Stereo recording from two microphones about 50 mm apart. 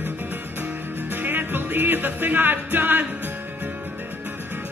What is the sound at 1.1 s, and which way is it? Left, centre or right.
Music, right.